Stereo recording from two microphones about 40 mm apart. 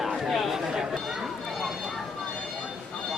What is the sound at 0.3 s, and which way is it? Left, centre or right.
Chatter, centre.